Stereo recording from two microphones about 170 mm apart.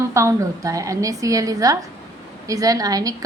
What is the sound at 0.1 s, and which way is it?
A woman's voice, 15° right (ahead or behind).